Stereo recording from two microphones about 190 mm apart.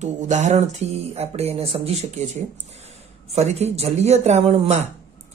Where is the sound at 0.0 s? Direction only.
35° right (ahead or behind).